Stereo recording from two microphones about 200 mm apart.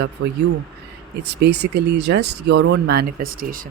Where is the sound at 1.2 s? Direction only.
55° right (ahead or behind).